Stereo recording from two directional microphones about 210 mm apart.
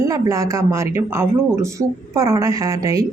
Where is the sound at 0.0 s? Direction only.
15° right (ahead or behind).